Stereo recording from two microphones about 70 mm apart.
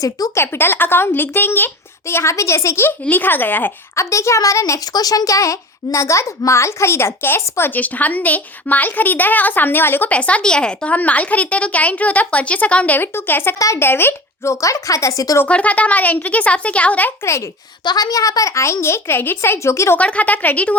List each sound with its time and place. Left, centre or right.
0.3 s a child's voice: left
3.0 s speech: left
3.9 s a woman's voice: left
4.9 s a woman's voice: left
7.8 s speech: left
10.1 s speech: centre
13.1 s a child's voice: left
14.5 s a woman's voice: left
15.4 s speech: centre
17.8 s a child's voice: left
20.0 s speech: centre